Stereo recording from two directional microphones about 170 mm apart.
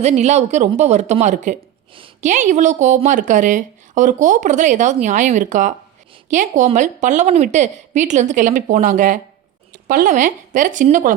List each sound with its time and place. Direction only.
0.0 s speech: 40° right (ahead or behind)